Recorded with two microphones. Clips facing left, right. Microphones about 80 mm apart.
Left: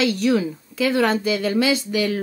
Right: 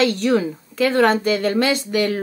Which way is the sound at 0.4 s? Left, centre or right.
Right.